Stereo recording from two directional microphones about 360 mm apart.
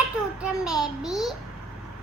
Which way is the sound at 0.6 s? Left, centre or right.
Centre.